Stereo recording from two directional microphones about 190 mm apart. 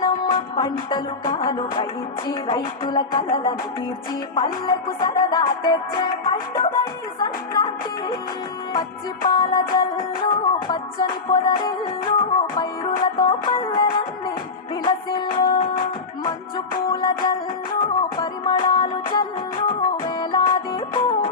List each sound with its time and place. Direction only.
0.0 s music: 30° left (ahead or behind)
4.4 s music: 25° left (ahead or behind)
9.2 s music: 25° left (ahead or behind)
14.8 s music: 25° left (ahead or behind)
16.7 s music: 25° left (ahead or behind)